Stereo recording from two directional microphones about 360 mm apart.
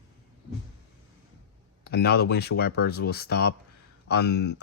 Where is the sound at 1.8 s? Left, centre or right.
Left.